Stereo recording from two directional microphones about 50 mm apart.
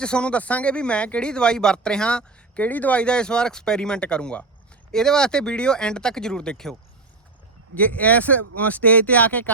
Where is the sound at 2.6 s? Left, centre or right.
Left.